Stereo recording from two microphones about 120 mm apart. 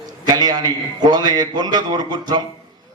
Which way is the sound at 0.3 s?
35° right (ahead or behind).